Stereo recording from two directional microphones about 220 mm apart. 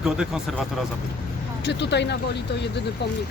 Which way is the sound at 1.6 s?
50° left (ahead or behind).